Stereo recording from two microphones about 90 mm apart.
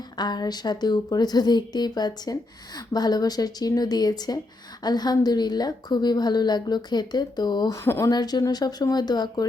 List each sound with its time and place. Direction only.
0.2 s a woman's voice: 50° left (ahead or behind)
7.8 s speech: 30° left (ahead or behind)
8.1 s a woman's voice: 50° left (ahead or behind)